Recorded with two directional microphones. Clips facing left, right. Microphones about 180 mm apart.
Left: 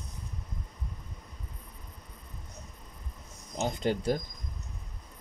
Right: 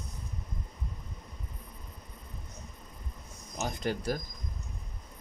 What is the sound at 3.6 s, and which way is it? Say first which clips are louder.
Speech: left 3 dB; 25° left (ahead or behind).